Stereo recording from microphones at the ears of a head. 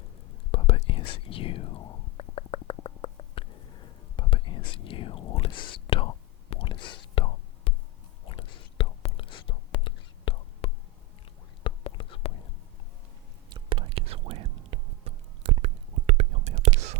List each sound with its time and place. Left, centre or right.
0.5 s whispering: left
13.5 s whispering: right